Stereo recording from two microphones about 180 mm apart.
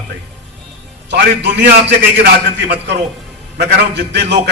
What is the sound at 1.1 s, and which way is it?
A man's voice, 70° right (ahead or behind).